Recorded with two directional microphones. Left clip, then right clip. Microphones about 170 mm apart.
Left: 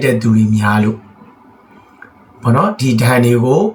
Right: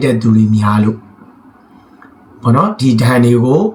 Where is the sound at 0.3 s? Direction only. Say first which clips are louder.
Right 2 dB; 15° left (ahead or behind).